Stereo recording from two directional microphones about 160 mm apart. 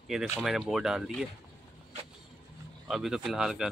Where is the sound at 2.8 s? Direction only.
Centre (ahead or behind).